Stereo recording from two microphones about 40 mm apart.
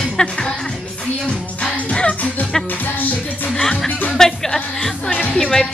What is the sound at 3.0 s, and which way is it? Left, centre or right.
Music, left.